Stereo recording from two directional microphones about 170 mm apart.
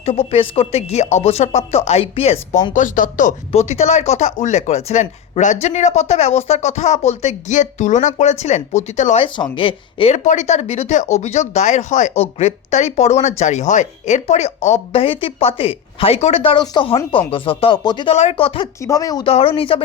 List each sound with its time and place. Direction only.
0.0 s speech: 35° left (ahead or behind)
2.7 s speech: 50° left (ahead or behind)
9.2 s speech: 30° left (ahead or behind)
18.8 s speech: 20° left (ahead or behind)
19.3 s speech: 35° left (ahead or behind)